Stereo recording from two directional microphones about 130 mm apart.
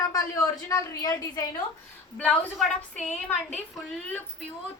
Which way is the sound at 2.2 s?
10° left (ahead or behind).